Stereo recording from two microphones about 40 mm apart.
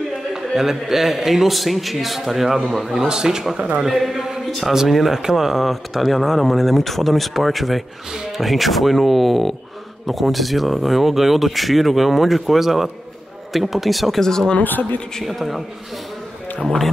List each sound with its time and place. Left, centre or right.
0.6 s speech: centre
3.1 s a man's voice: centre
14.6 s speech: left
15.2 s speech: centre